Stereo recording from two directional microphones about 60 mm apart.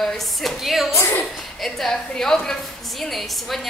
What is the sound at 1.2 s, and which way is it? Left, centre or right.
Speech, centre.